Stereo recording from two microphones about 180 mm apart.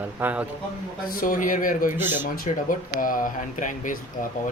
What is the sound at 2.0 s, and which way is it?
Speech, 10° right (ahead or behind).